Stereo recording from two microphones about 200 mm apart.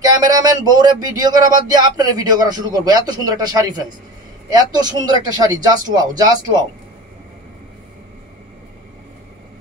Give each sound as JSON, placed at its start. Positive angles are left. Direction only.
{"t": 0.0, "sound": "speech", "side_deg": -20}